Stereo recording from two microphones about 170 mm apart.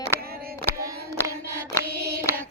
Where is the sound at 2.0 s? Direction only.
70° right (ahead or behind).